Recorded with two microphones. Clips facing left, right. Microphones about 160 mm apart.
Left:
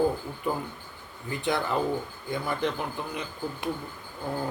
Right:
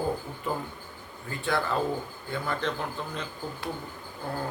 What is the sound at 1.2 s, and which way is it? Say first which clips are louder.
A man's voice: left 1 dB; 15° left (ahead or behind).